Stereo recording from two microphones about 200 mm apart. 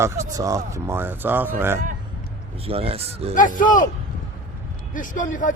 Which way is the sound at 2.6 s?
30° right (ahead or behind).